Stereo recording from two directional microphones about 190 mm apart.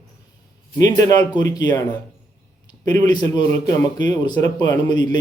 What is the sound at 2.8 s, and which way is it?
Speech, 20° left (ahead or behind).